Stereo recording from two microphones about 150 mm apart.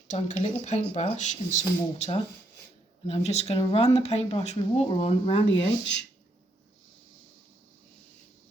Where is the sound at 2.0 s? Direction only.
40° left (ahead or behind).